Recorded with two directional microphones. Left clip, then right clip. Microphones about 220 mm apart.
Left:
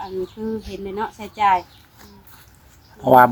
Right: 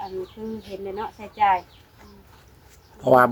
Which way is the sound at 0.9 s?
45° left (ahead or behind).